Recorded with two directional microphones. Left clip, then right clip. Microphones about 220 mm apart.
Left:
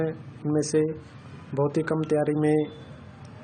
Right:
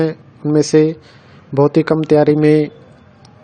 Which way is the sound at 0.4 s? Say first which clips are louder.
Right 12 dB; 35° right (ahead or behind).